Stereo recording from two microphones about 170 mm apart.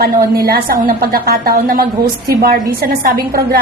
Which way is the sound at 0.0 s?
65° right (ahead or behind).